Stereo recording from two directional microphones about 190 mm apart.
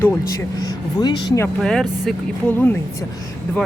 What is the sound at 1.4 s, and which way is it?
Speech, 5° left (ahead or behind).